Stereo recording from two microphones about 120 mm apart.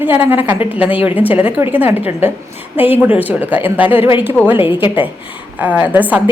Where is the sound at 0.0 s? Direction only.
15° right (ahead or behind).